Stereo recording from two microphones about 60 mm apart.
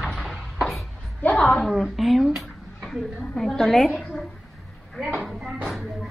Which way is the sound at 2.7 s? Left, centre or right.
Centre.